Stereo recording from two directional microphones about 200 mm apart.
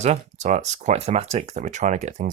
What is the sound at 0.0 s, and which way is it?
Speech, 35° right (ahead or behind).